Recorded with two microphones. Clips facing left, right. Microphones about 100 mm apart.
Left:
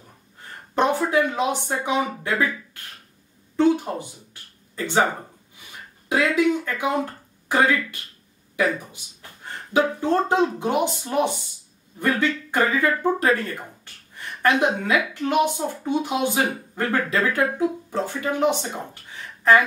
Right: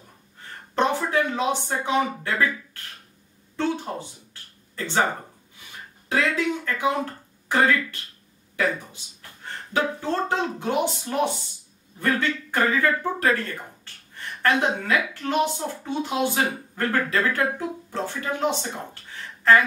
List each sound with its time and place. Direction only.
0.7 s speech: 15° left (ahead or behind)
6.0 s speech: 15° left (ahead or behind)
14.1 s a sound: 15° left (ahead or behind)
14.9 s speech: 15° left (ahead or behind)